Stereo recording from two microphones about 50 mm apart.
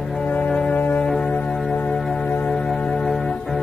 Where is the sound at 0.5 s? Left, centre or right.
Centre.